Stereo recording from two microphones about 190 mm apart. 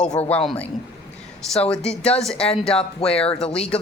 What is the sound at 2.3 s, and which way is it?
Speech, 30° left (ahead or behind).